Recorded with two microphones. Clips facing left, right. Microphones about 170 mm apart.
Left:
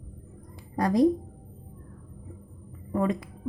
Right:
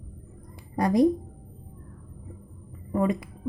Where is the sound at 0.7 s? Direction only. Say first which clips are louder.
Right 1 dB; 15° right (ahead or behind).